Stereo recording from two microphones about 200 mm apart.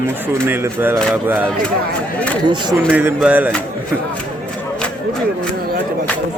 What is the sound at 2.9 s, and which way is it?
Speech, 5° right (ahead or behind).